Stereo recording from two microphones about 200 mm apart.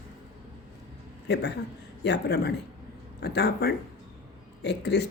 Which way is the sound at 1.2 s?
60° left (ahead or behind).